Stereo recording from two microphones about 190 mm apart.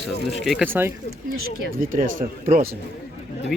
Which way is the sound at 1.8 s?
45° right (ahead or behind).